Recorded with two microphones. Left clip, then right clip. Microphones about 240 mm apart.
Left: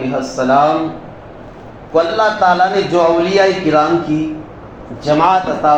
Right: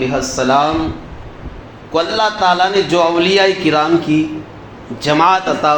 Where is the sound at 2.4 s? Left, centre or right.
Right.